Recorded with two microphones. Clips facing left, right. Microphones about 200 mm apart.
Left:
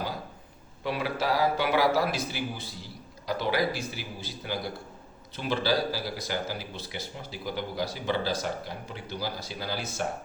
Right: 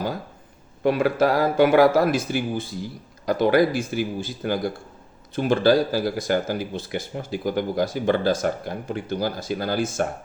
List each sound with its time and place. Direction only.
0.8 s a man's voice: 50° right (ahead or behind)